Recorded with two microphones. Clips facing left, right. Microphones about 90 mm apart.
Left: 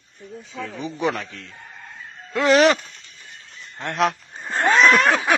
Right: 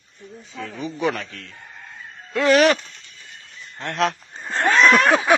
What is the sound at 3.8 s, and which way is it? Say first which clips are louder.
Speech: left 1 dB; 20° left (ahead or behind).